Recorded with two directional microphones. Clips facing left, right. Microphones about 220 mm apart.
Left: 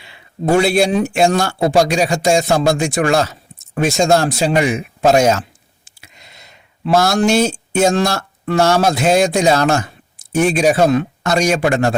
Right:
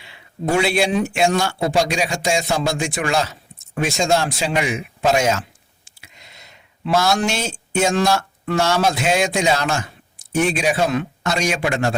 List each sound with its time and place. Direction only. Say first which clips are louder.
0.5 s speech: left 5 dB; 40° left (ahead or behind)
6.8 s speech: left 5 dB; 40° left (ahead or behind)